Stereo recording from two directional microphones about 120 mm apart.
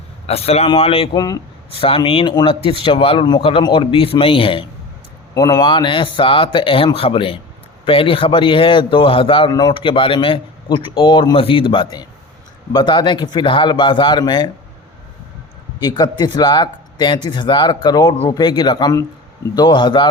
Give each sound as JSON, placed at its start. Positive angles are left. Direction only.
{"t": 0.3, "sound": "a man's voice", "side_deg": 60}
{"t": 1.1, "sound": "speech", "side_deg": 35}
{"t": 1.7, "sound": "speech", "side_deg": 50}
{"t": 2.0, "sound": "speech", "side_deg": 40}
{"t": 5.3, "sound": "speech", "side_deg": 30}
{"t": 5.6, "sound": "speech", "side_deg": 45}
{"t": 15.8, "sound": "speech", "side_deg": 35}